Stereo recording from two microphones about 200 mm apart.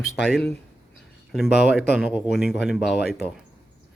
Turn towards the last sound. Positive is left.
turn(degrees=0)  # may be behind; listen again after turning